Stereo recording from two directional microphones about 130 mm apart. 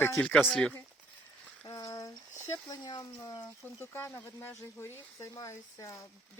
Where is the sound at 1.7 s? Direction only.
25° left (ahead or behind).